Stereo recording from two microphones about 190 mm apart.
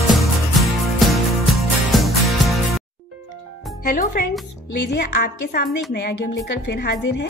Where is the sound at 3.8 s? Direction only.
45° left (ahead or behind).